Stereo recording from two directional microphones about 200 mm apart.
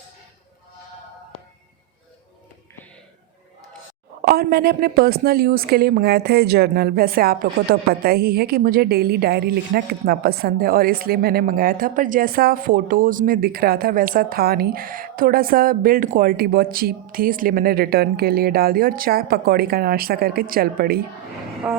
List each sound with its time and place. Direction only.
4.3 s a woman's voice: 50° right (ahead or behind)
21.7 s vehicle: 5° right (ahead or behind)